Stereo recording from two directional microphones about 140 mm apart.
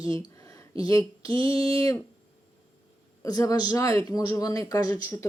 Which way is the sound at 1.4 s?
25° left (ahead or behind).